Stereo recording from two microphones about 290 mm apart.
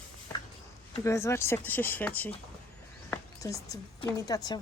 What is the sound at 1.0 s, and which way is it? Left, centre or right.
A woman's voice, centre.